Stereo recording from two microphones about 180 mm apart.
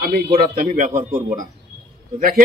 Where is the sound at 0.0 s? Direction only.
50° right (ahead or behind).